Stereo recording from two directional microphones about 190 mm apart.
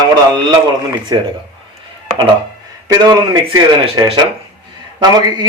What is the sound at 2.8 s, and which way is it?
A man's voice, 20° right (ahead or behind).